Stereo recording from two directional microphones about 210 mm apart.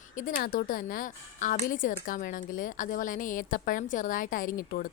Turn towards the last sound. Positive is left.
turn(degrees=40)  # may be behind; listen again after turning